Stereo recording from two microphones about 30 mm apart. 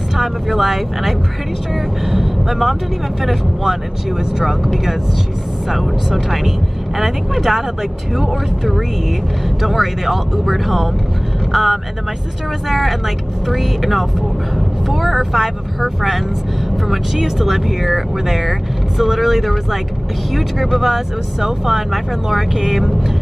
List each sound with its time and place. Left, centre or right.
0.1 s speech: centre
4.2 s speech: centre
5.7 s speech: centre
20.8 s speech: centre